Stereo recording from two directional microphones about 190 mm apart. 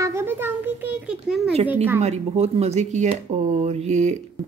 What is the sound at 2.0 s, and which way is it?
Speech, 35° right (ahead or behind).